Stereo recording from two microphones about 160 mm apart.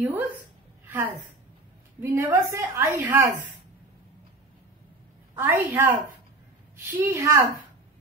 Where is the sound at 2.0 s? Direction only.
20° right (ahead or behind).